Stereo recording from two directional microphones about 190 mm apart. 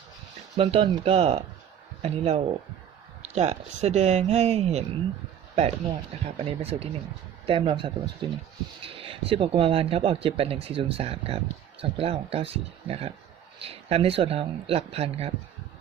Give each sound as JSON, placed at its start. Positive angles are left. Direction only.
{"t": 0.5, "sound": "speech", "side_deg": -30}